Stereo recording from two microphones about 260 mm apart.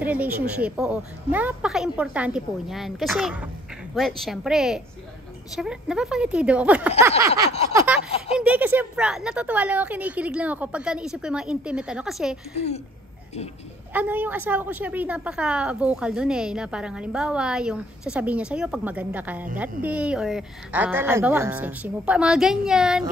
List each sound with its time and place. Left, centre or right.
0.0 s a woman's voice: centre
7.0 s snicker: centre
7.7 s a woman's voice: centre
12.5 s speech: left
13.9 s a woman's voice: centre